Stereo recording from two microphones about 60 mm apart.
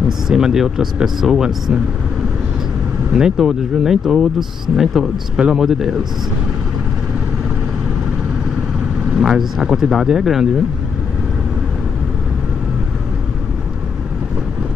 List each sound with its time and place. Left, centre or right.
0.3 s speech: centre
3.1 s speech: centre
9.1 s speech: centre